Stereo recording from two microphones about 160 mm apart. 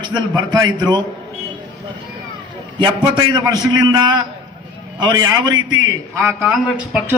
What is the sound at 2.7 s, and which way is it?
A man's voice, 30° right (ahead or behind).